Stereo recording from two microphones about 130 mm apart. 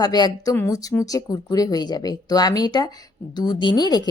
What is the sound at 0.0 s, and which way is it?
A woman's voice, 30° left (ahead or behind).